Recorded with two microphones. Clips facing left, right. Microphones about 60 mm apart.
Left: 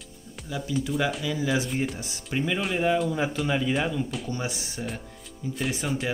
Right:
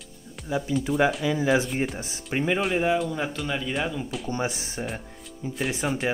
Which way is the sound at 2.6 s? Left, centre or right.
Centre.